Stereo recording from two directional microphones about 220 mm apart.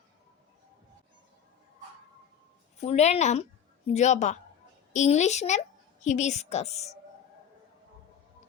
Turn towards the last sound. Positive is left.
turn(degrees=30)  # may be behind; listen again after turning